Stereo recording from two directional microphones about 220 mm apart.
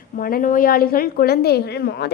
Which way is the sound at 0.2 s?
40° left (ahead or behind).